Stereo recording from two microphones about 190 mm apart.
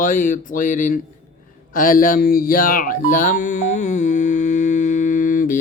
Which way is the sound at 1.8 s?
45° left (ahead or behind).